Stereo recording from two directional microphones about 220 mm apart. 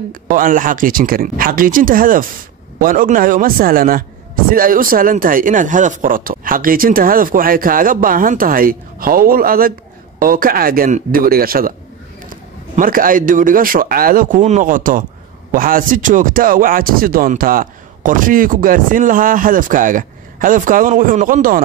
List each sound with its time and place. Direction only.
0.1 s speech: 40° right (ahead or behind)